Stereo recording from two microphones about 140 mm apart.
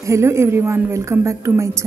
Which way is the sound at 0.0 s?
20° right (ahead or behind).